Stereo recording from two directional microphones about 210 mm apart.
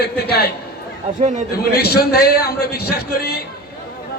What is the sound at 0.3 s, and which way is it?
Speech, 50° left (ahead or behind).